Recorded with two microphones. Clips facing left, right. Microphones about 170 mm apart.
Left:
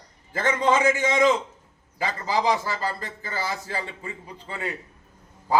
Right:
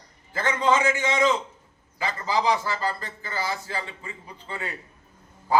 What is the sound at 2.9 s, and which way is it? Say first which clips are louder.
Speech: even; 40° left (ahead or behind).